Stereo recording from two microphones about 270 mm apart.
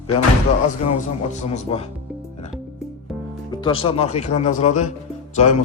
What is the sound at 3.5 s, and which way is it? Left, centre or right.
A man's voice, centre.